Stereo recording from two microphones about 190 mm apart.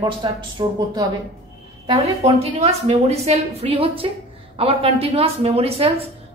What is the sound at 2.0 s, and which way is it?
A woman's voice, 35° right (ahead or behind).